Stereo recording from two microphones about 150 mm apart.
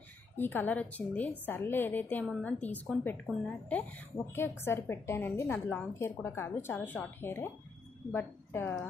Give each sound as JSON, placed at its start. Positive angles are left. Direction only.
{"t": 0.4, "sound": "a woman's voice", "side_deg": 15}